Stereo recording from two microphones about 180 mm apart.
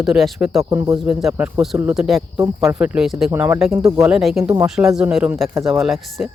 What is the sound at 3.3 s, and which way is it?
Speech, 15° right (ahead or behind).